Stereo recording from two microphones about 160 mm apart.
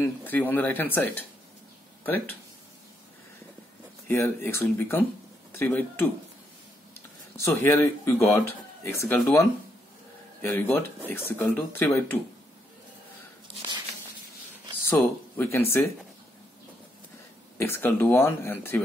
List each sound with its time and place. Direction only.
0.0 s speech: 10° left (ahead or behind)
4.1 s speech: 15° left (ahead or behind)
7.3 s speech: 15° left (ahead or behind)
14.9 s speech: 15° left (ahead or behind)
17.6 s speech: 15° left (ahead or behind)